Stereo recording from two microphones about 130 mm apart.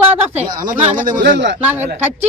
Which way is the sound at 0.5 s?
90° right.